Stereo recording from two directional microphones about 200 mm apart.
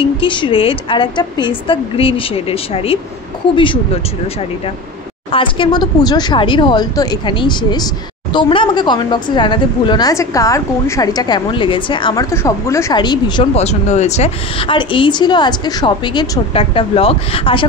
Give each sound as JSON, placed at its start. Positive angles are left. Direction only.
{"t": 0.0, "sound": "speech", "side_deg": 25}
{"t": 5.3, "sound": "speech", "side_deg": 25}